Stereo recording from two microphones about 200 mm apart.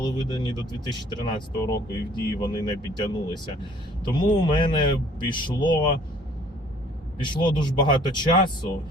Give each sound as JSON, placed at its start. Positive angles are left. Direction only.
{"t": 0.0, "sound": "speech", "side_deg": 20}
{"t": 7.2, "sound": "speech", "side_deg": 20}